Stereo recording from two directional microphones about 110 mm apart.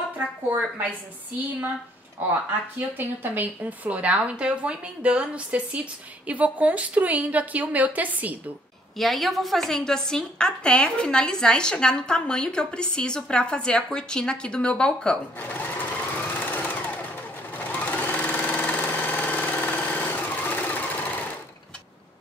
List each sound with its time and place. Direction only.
3.0 s a woman's voice: 15° right (ahead or behind)
8.9 s a woman's voice: centre (ahead or behind); by 17.0 s 15° left (ahead or behind)
17.6 s sewing machine: 15° left (ahead or behind)